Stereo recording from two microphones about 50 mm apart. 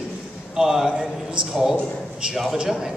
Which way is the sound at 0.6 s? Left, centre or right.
Centre.